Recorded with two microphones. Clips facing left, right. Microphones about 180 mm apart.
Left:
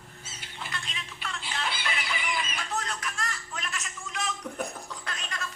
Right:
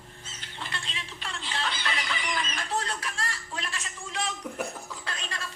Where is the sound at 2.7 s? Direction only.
30° right (ahead or behind).